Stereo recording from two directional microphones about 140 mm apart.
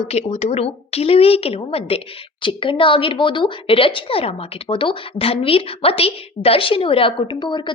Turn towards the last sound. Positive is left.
turn(degrees=35)  # may be behind; listen again after turning